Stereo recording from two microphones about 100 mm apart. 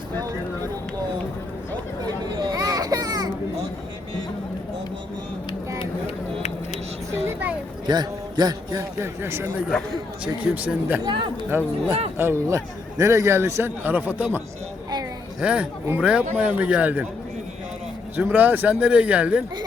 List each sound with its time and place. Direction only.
2.2 s a sound: 40° right (ahead or behind)
7.9 s a man's voice: 45° right (ahead or behind)
8.7 s a man's voice: 25° right (ahead or behind)
11.0 s speech: 55° right (ahead or behind)
11.4 s a man's voice: 20° right (ahead or behind)
18.2 s speech: 15° right (ahead or behind)